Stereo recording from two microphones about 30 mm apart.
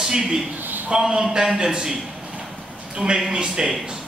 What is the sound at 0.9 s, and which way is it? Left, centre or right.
A man's voice, right.